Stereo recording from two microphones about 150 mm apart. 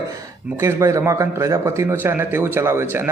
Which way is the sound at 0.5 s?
20° right (ahead or behind).